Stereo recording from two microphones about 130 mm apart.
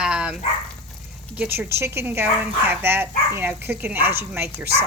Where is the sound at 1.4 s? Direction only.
15° right (ahead or behind).